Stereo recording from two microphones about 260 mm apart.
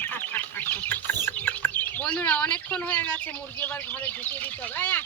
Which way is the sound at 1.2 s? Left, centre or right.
Centre.